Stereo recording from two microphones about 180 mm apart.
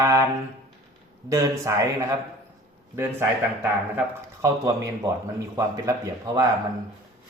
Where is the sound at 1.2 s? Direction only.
15° right (ahead or behind).